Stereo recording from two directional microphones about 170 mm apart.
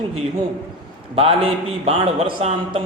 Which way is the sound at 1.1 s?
35° right (ahead or behind).